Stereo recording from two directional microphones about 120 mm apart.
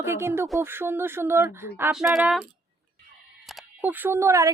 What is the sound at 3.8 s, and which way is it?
Speech, 15° right (ahead or behind).